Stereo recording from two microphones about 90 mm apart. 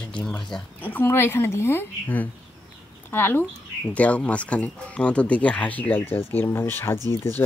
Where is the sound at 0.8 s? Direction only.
20° left (ahead or behind).